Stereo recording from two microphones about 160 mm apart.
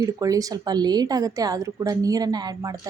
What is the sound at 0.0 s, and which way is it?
A woman's voice, 20° right (ahead or behind).